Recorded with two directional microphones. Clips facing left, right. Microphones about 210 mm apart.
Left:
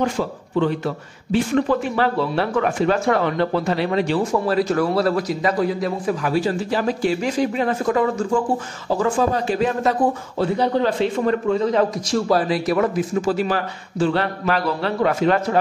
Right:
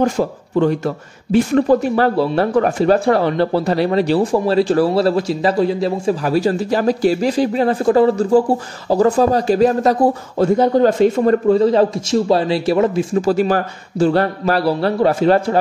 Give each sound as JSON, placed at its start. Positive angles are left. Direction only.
{"t": 0.0, "sound": "speech", "side_deg": -45}
{"t": 6.3, "sound": "speech", "side_deg": -40}